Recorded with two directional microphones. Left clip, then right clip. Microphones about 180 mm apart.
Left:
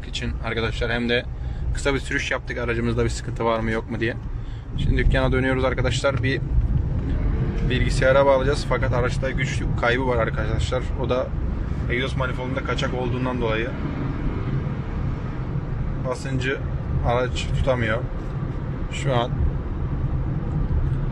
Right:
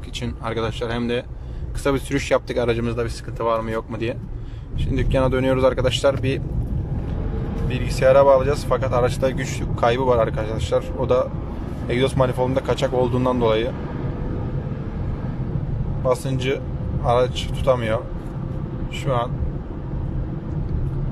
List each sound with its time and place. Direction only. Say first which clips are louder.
0.5 s speech: even; 15° right (ahead or behind)
2.9 s speech: left 1 dB; 5° right (ahead or behind)
7.6 s speech: right 3 dB; 10° right (ahead or behind)
11.9 s speech: right 6 dB; 30° right (ahead or behind)
16.1 s speech: right 5 dB; 15° right (ahead or behind)
19.1 s speech: right 1 dB; centre (ahead or behind)